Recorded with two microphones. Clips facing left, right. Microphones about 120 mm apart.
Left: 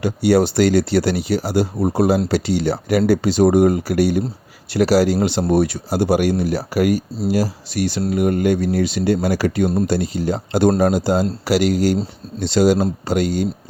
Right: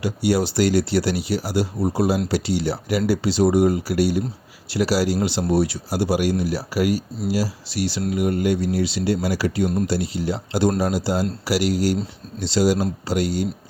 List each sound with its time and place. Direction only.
0.0 s speech: 55° left (ahead or behind)